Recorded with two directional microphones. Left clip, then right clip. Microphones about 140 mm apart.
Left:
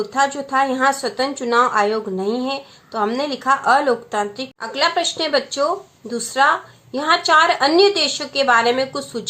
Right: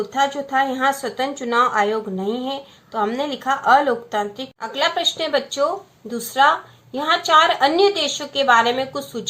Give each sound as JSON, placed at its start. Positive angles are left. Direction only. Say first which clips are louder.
{"t": 0.5, "sound": "speech", "louder": "left 3 dB", "side_deg": 35}